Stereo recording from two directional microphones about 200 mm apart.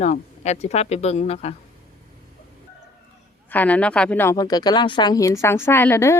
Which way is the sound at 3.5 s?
10° left (ahead or behind).